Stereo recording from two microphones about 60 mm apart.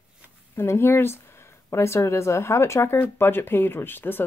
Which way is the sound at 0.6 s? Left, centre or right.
Left.